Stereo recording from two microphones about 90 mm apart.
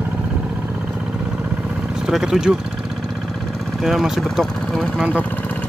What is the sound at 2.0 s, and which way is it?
Speech, 5° right (ahead or behind).